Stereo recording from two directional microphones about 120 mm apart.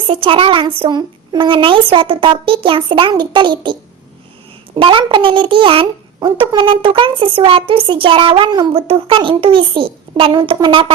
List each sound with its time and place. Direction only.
0.1 s speech: 45° right (ahead or behind)